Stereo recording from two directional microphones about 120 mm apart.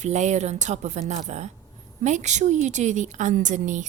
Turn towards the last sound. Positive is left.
turn(degrees=-90)